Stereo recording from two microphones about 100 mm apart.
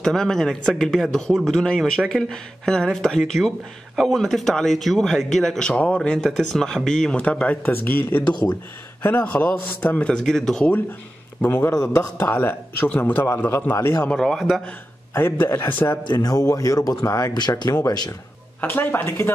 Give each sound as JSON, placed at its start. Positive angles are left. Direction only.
{"t": 0.0, "sound": "speech", "side_deg": 5}
{"t": 8.2, "sound": "speech", "side_deg": 50}
{"t": 9.0, "sound": "speech", "side_deg": 15}
{"t": 11.4, "sound": "a man's voice", "side_deg": 20}
{"t": 14.0, "sound": "speech", "side_deg": 5}
{"t": 15.1, "sound": "a man's voice", "side_deg": 20}
{"t": 16.0, "sound": "a man's voice", "side_deg": 45}
{"t": 17.3, "sound": "a man's voice", "side_deg": 45}
{"t": 18.6, "sound": "a man's voice", "side_deg": 20}